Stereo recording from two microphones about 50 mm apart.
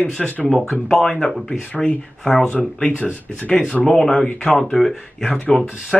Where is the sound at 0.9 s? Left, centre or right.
Centre.